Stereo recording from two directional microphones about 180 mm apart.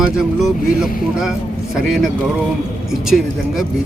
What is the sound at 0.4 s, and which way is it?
Speech, 5° right (ahead or behind).